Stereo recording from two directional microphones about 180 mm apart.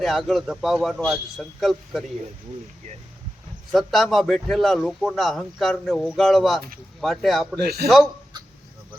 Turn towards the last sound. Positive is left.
turn(degrees=-60)  # may be behind; listen again after turning